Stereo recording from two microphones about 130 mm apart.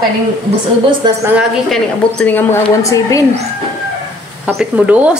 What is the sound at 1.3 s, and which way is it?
Speech, 5° right (ahead or behind).